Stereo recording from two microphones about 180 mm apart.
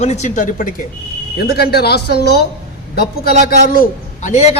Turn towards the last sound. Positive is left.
turn(degrees=40)  # may be behind; listen again after turning